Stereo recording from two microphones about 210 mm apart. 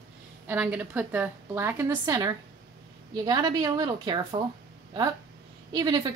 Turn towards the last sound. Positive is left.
turn(degrees=-20)  # may be behind; listen again after turning